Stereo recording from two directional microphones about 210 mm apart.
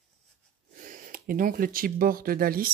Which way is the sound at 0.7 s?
40° right (ahead or behind).